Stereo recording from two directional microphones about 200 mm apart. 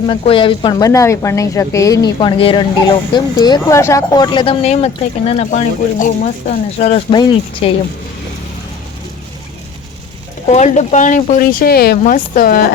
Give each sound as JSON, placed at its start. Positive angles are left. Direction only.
{"t": 0.1, "sound": "a woman's voice", "side_deg": 25}
{"t": 10.5, "sound": "speech", "side_deg": 35}